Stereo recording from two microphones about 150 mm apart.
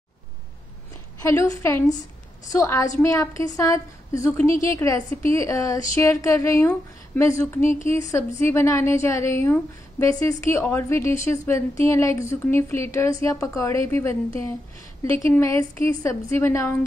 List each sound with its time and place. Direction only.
1.3 s a woman's voice: 20° left (ahead or behind)